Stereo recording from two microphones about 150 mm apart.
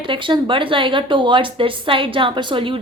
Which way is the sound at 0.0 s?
35° right (ahead or behind).